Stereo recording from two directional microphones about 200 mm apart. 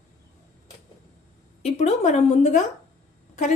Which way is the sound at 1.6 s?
35° left (ahead or behind).